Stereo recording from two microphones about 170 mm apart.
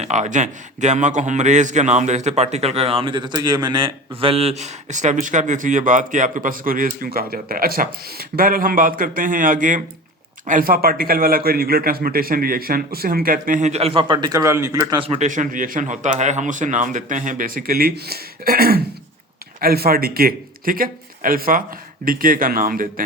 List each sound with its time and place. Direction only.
0.0 s a man's voice: 45° right (ahead or behind); by 15.0 s 20° right (ahead or behind)
15.0 s speech: 35° right (ahead or behind)
15.3 s a man's voice: 50° right (ahead or behind)